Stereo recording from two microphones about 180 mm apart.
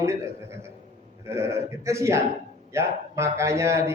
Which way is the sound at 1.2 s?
15° right (ahead or behind).